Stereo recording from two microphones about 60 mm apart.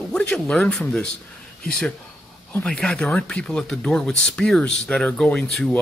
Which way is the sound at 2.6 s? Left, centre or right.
Centre.